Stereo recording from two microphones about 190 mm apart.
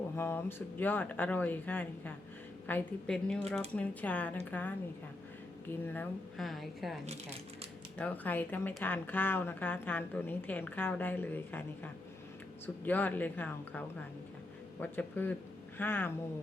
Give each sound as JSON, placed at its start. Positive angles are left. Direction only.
{"t": 0.2, "sound": "speech", "side_deg": 10}
{"t": 5.8, "sound": "speech", "side_deg": 10}
{"t": 7.0, "sound": "speech", "side_deg": -35}
{"t": 7.9, "sound": "speech", "side_deg": 10}